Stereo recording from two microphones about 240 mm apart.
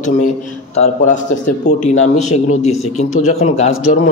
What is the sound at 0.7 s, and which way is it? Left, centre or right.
A man's voice, left.